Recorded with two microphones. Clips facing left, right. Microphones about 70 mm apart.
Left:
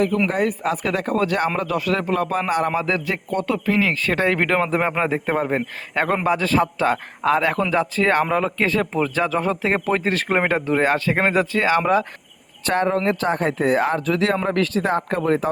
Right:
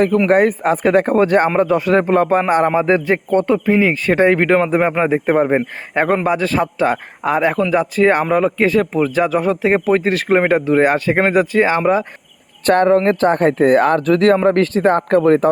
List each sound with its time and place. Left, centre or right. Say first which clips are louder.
0.3 s a man's voice: right 8 dB; right
12.6 s speech: right 8 dB; right
14.4 s speech: right 7 dB; right